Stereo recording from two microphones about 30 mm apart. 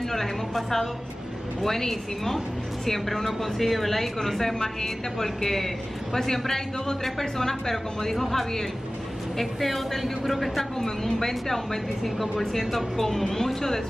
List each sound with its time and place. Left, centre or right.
0.1 s speech: centre